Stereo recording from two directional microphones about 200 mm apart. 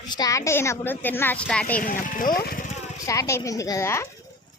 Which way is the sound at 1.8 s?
45° left (ahead or behind).